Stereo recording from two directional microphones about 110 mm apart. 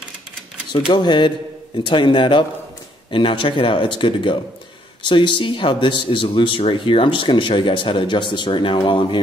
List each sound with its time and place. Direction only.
0.9 s speech: 45° left (ahead or behind)